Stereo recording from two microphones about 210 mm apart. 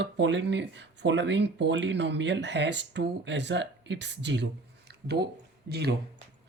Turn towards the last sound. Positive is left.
turn(degrees=-50)  # may be behind; listen again after turning